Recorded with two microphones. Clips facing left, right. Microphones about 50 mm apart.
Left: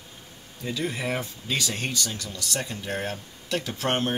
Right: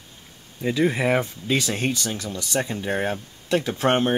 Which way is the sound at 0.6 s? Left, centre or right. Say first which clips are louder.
Right 8 dB; right.